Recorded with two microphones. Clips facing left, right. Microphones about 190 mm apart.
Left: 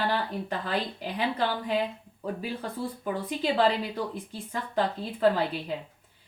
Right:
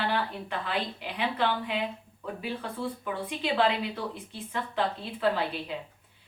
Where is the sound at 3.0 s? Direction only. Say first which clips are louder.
Left 6 dB; 40° left (ahead or behind).